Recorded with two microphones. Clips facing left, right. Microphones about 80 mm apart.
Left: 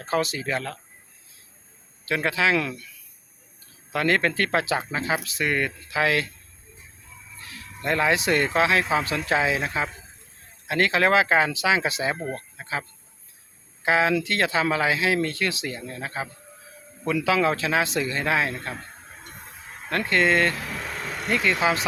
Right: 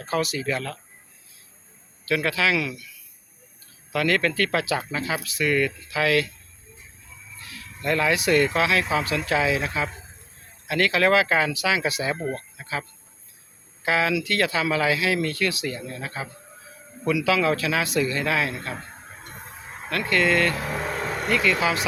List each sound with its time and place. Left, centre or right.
0.0 s speech: left
2.0 s speech: left
2.6 s speech: left
3.9 s speech: left
7.8 s speech: left
12.5 s a sound: left
13.8 s speech: left
19.9 s speech: left
20.5 s vehicle: right
21.2 s speech: left